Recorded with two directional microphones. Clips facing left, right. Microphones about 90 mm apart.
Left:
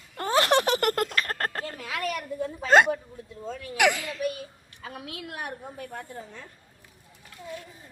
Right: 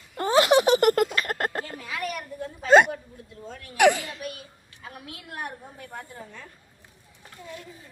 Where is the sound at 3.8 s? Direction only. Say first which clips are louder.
Right 4 dB; 30° right (ahead or behind).